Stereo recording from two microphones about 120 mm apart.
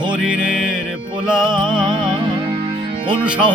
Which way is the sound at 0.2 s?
5° right (ahead or behind).